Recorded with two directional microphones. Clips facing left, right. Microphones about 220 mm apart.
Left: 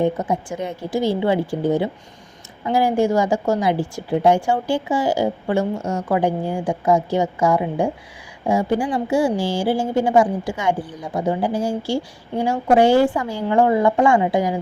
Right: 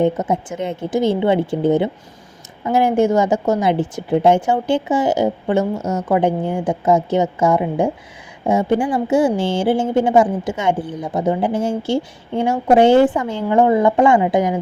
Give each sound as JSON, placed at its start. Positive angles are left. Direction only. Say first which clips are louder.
{"t": 0.0, "sound": "a woman's voice", "louder": "right 3 dB", "side_deg": -20}